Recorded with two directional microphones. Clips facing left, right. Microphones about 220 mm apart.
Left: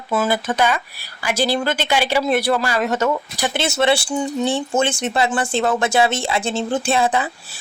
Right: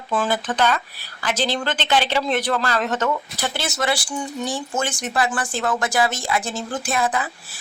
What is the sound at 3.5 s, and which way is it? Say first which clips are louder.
Speech: left 7 dB; 25° left (ahead or behind).